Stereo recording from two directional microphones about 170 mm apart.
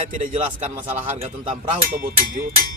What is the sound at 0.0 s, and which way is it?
Speech, 45° right (ahead or behind).